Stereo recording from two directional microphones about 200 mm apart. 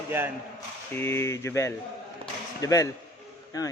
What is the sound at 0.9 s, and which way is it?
Speech, 10° left (ahead or behind).